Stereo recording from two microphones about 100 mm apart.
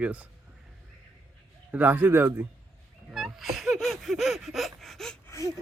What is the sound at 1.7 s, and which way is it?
Speech, 15° right (ahead or behind).